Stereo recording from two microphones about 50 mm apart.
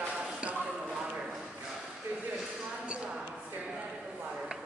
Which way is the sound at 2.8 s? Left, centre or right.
Right.